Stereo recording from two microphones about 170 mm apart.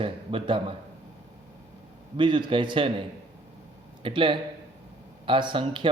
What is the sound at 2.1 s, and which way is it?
Speech, 30° right (ahead or behind).